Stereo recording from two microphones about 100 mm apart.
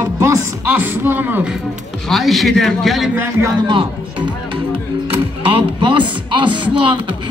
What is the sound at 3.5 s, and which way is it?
Speech, 60° right (ahead or behind).